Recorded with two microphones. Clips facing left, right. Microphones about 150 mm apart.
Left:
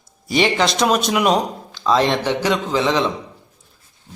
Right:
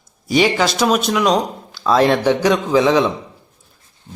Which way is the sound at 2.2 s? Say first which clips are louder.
Right 4 dB; 10° right (ahead or behind).